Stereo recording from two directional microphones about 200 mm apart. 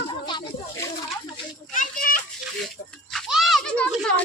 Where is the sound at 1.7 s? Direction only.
45° left (ahead or behind).